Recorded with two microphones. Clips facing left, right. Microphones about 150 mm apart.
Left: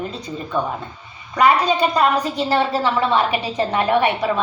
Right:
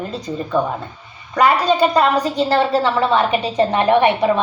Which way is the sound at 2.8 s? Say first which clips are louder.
Right 2 dB; 30° right (ahead or behind).